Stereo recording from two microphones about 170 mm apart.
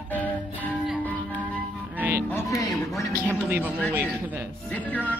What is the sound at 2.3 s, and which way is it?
Music, 20° left (ahead or behind).